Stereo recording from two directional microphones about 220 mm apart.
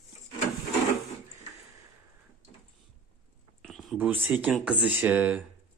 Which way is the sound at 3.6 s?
Centre (ahead or behind).